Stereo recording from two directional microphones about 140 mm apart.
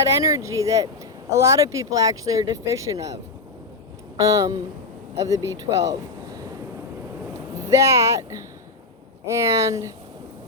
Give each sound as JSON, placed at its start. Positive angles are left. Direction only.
{"t": 0.0, "sound": "speech", "side_deg": -25}
{"t": 4.2, "sound": "speech", "side_deg": -25}
{"t": 7.7, "sound": "speech", "side_deg": -20}